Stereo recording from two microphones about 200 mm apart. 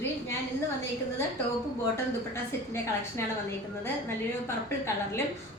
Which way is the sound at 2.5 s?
15° left (ahead or behind).